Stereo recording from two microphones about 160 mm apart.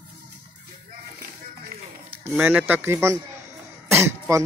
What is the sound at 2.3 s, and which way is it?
Speech, 5° right (ahead or behind).